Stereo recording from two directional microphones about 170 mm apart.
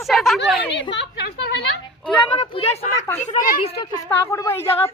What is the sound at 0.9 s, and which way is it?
Speech, 80° left.